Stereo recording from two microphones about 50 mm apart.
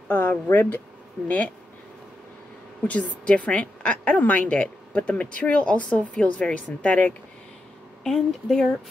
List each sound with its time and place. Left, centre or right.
0.1 s speech: left
2.8 s a woman's voice: left
8.0 s speech: centre